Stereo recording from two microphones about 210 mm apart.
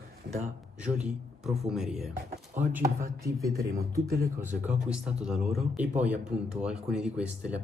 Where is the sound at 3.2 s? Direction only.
15° right (ahead or behind).